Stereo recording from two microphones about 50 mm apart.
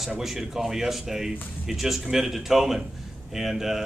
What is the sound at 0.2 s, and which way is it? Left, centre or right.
Speech, centre.